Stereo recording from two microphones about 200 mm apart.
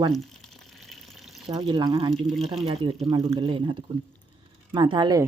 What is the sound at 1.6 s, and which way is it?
Speech, 20° right (ahead or behind).